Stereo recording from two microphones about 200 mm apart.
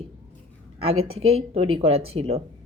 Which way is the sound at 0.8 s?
30° right (ahead or behind).